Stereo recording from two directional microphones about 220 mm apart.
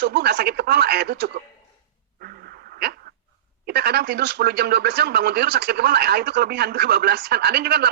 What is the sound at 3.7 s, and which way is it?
Speech, 45° right (ahead or behind).